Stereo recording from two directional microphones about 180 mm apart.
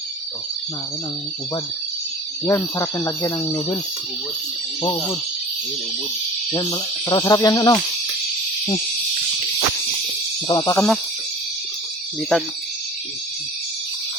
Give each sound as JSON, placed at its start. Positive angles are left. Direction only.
{"t": 2.4, "sound": "speech", "side_deg": 15}
{"t": 6.5, "sound": "cricket", "side_deg": 25}
{"t": 10.5, "sound": "cricket", "side_deg": 20}